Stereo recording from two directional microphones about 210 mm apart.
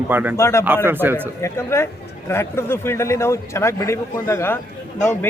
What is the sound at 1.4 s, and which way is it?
Speech, 10° left (ahead or behind).